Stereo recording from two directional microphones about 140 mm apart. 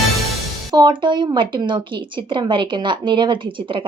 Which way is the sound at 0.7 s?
35° right (ahead or behind).